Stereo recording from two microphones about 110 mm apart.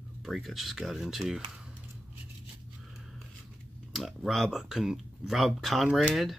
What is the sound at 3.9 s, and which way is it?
Speech, centre (ahead or behind).